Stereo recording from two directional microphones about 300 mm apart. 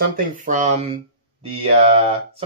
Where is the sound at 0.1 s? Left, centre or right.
Right.